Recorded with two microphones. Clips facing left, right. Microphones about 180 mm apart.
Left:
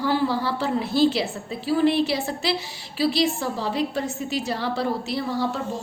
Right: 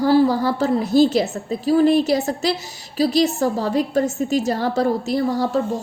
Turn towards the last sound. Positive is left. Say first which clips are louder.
# right 6 dB
turn(degrees=-45)  # may be behind; listen again after turning